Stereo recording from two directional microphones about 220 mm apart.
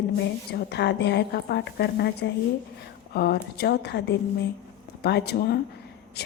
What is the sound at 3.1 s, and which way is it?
A woman's voice, 45° left (ahead or behind).